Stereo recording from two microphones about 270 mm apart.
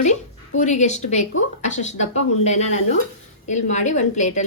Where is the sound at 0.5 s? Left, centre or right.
Left.